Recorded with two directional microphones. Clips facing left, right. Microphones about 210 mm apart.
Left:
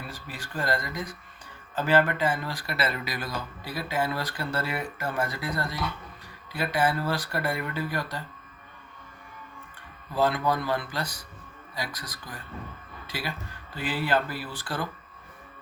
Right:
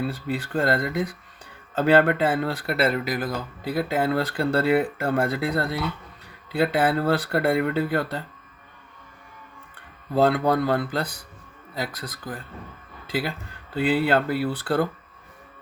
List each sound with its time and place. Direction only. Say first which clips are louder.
0.1 s speech: right 11 dB; 60° right (ahead or behind)
10.1 s speech: right 5 dB; 60° right (ahead or behind)
13.8 s speech: right 6 dB; 60° right (ahead or behind)